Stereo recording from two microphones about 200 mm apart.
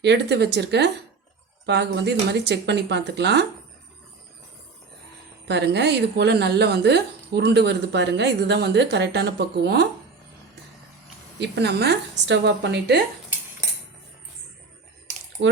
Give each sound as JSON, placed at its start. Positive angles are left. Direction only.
{"t": 0.0, "sound": "speech", "side_deg": -55}
{"t": 5.5, "sound": "speech", "side_deg": -55}
{"t": 11.3, "sound": "speech", "side_deg": -55}
{"t": 15.4, "sound": "speech", "side_deg": -60}